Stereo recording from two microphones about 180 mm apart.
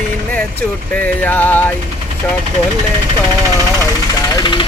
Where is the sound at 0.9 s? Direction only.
10° left (ahead or behind).